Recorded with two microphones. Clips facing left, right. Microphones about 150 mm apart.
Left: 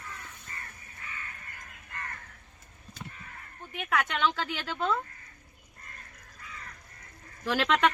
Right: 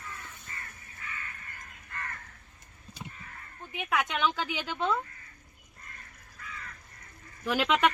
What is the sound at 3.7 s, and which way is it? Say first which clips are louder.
A woman's voice: even; 5° right (ahead or behind).